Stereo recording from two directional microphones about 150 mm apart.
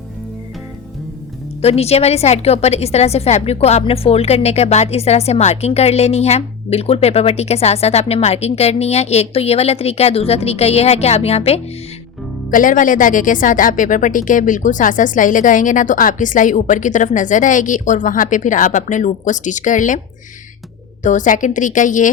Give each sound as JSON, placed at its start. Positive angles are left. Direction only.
{"t": 1.6, "sound": "a woman's voice", "side_deg": 45}
{"t": 12.5, "sound": "speech", "side_deg": 60}
{"t": 21.0, "sound": "speech", "side_deg": 55}